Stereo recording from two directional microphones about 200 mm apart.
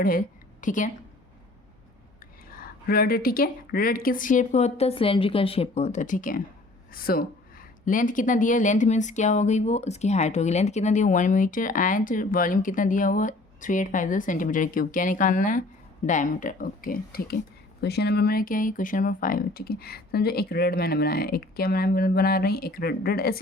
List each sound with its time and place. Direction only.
0.0 s a woman's voice: 45° left (ahead or behind)
2.6 s speech: 50° left (ahead or behind)